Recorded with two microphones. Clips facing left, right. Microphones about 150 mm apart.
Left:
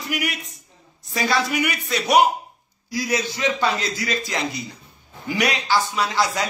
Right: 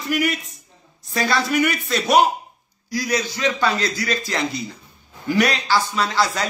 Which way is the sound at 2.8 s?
25° left (ahead or behind).